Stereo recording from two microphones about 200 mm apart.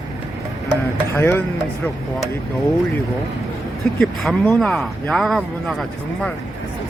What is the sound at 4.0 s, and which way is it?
Speech, centre (ahead or behind).